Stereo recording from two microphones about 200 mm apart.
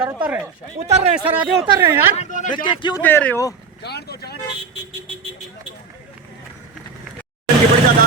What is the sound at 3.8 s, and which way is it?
Speech, 55° left (ahead or behind).